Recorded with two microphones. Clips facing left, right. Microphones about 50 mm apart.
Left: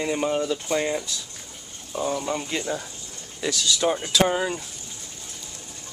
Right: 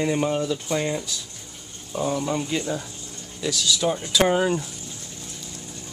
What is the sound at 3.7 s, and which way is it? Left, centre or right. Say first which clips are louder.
Speech: left 1 dB; centre.